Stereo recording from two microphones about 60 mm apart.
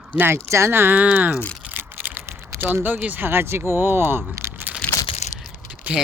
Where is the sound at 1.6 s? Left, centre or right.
Right.